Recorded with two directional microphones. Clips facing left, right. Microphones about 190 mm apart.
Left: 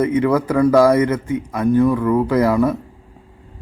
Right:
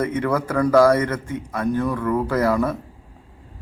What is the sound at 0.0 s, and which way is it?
Speech, 10° left (ahead or behind).